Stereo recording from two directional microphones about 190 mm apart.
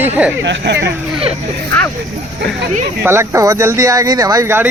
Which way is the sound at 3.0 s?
15° right (ahead or behind).